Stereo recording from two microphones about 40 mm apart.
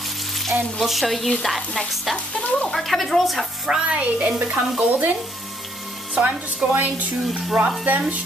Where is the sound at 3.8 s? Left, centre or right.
Right.